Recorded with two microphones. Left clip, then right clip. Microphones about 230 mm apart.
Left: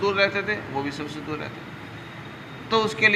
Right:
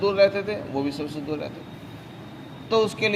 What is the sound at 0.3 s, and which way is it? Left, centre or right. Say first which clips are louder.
Speech: left 2 dB; right.